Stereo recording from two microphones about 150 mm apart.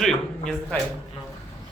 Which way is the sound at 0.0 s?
5° left (ahead or behind).